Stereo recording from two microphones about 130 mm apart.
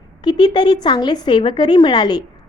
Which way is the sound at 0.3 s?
35° left (ahead or behind).